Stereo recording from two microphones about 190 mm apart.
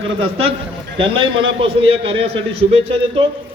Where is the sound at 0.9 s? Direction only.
25° right (ahead or behind).